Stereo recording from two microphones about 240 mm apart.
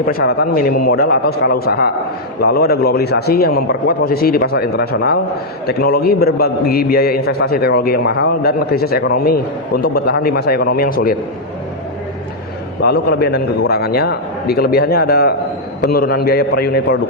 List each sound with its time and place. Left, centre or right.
0.0 s a man's voice: left
12.8 s a man's voice: left